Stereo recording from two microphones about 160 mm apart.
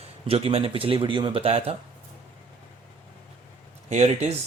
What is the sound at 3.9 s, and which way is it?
Speech, 45° right (ahead or behind).